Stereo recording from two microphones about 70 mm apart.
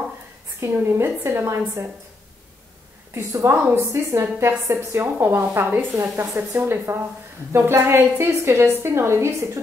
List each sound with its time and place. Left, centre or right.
0.6 s a woman's voice: right
3.2 s a woman's voice: right